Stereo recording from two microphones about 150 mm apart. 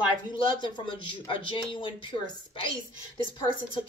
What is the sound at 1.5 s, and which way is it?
Speech, 35° left (ahead or behind).